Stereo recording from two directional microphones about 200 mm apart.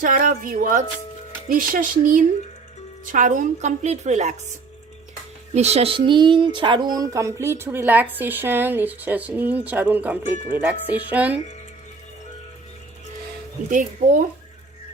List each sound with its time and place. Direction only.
0.0 s a woman's voice: 45° right (ahead or behind)
5.5 s speech: 30° right (ahead or behind); by 11.3 s 10° right (ahead or behind)
13.7 s a woman's voice: 40° right (ahead or behind)